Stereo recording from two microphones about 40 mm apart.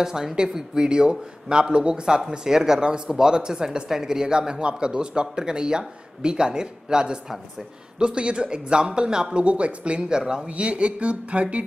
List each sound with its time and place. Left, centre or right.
0.0 s speech: centre
10.5 s speech: right